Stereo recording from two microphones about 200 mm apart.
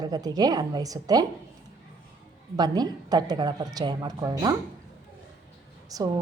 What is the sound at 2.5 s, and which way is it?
A woman's voice, 20° right (ahead or behind).